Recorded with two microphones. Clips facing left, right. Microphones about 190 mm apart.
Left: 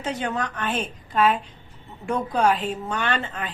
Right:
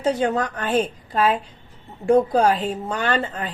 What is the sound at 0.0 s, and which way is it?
A woman's voice, 35° right (ahead or behind).